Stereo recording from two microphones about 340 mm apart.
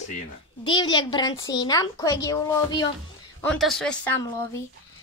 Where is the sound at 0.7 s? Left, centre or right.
Centre.